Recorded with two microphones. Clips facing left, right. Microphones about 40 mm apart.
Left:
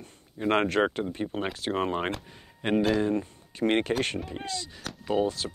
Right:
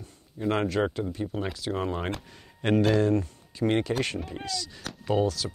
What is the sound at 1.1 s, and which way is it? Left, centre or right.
Speech, left.